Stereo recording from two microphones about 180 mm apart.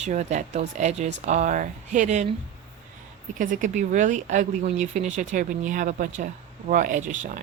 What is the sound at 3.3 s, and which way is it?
Speech, 45° right (ahead or behind).